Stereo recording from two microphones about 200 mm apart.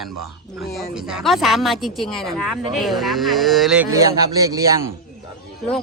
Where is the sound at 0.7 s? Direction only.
5° right (ahead or behind).